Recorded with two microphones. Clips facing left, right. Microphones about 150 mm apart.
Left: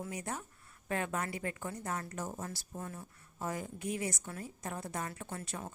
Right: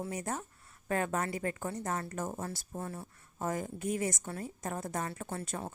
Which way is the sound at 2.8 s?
30° right (ahead or behind).